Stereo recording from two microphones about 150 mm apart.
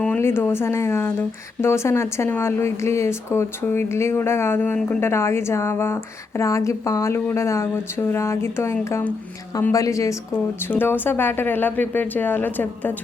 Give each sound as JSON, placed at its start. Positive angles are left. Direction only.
{"t": 0.0, "sound": "speech", "side_deg": 10}